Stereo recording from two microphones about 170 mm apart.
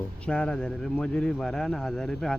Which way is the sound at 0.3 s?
5° left (ahead or behind).